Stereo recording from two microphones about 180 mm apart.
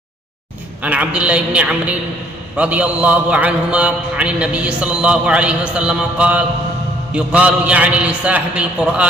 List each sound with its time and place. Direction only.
0.8 s a man's voice: 10° right (ahead or behind)